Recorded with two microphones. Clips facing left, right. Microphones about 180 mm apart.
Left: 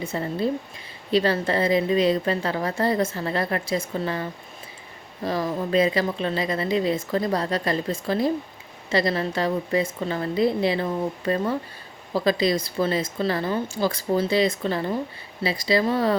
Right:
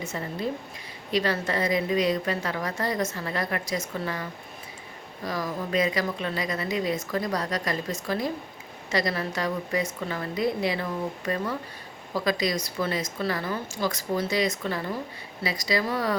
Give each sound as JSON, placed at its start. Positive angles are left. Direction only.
{"t": 0.0, "sound": "a woman's voice", "side_deg": 30}